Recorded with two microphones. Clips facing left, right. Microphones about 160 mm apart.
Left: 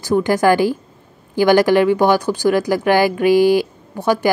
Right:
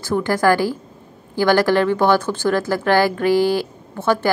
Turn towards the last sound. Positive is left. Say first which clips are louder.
# left 2 dB
turn(degrees=15)  # may be behind; listen again after turning